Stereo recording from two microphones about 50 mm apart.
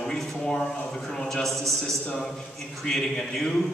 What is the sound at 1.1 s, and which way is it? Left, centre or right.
A man's voice, centre.